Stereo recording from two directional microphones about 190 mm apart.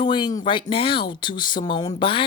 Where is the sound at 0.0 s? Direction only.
25° left (ahead or behind).